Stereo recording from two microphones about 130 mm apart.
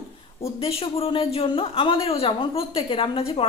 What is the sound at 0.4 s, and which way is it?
Speech, 50° left (ahead or behind).